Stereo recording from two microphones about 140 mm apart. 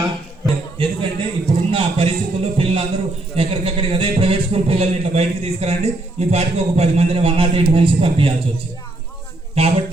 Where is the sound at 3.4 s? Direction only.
40° right (ahead or behind).